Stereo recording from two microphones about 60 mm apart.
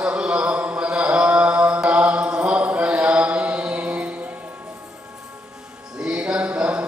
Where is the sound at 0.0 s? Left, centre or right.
Centre.